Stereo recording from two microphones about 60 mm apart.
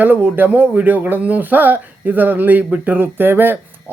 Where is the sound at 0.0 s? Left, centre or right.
Right.